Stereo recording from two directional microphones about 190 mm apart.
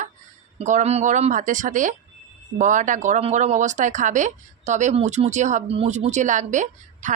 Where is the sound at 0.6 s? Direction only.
40° right (ahead or behind).